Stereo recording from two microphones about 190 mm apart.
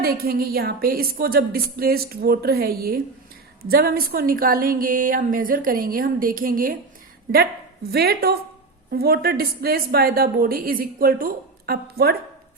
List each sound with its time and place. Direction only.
0.0 s speech: 55° right (ahead or behind)
7.9 s a woman's voice: 55° right (ahead or behind)